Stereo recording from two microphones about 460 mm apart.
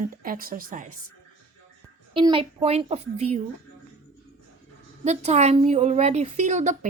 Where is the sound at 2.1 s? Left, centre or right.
Centre.